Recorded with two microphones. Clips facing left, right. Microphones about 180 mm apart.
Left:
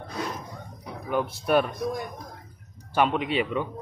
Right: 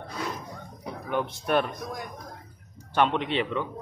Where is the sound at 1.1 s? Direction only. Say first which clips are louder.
Left 3 dB; 5° left (ahead or behind).